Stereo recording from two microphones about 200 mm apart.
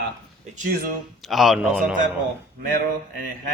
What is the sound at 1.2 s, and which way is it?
Speech, centre (ahead or behind).